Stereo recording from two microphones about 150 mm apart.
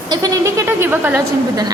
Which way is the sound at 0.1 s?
20° right (ahead or behind).